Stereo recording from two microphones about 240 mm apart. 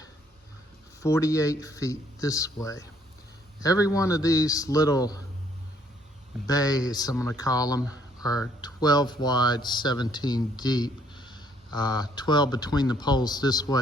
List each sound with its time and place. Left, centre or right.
1.0 s speech: centre
3.8 s speech: centre
6.5 s speech: centre